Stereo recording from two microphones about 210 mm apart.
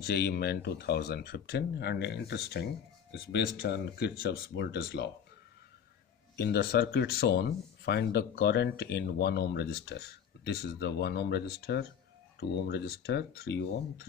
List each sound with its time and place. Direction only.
0.0 s speech: 50° left (ahead or behind)
6.3 s speech: 50° left (ahead or behind)